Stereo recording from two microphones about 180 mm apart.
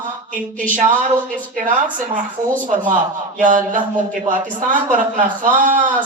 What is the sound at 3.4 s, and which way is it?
A man's voice, 45° right (ahead or behind).